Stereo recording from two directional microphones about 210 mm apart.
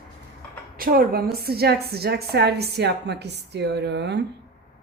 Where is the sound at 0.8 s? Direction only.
45° right (ahead or behind).